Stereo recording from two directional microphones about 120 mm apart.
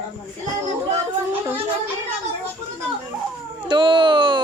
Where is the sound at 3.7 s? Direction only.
40° right (ahead or behind).